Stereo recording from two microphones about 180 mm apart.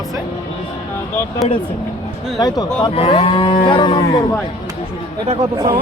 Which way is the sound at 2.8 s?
30° left (ahead or behind).